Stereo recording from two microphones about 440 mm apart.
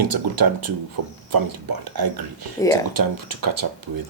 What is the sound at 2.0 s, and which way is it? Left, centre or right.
Speech, right.